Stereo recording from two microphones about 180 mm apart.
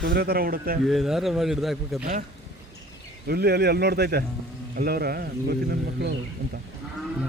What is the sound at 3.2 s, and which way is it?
A man's voice, 65° right (ahead or behind).